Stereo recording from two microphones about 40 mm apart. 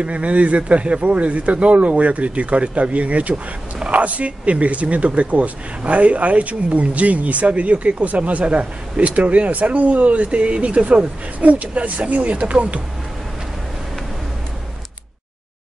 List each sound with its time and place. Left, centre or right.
0.0 s speech: right